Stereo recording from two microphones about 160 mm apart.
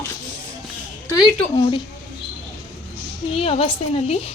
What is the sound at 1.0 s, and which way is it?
Speech, 25° left (ahead or behind).